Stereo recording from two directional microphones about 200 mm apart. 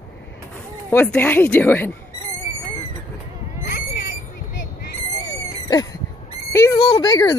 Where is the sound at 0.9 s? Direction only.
10° left (ahead or behind).